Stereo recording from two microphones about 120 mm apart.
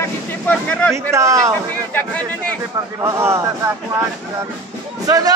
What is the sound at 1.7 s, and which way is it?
Speech, 15° left (ahead or behind).